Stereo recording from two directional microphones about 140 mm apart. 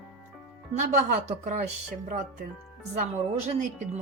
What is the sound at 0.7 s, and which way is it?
A woman's voice, 55° right (ahead or behind).